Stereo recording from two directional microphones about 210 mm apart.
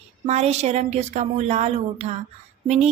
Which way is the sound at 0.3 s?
30° right (ahead or behind).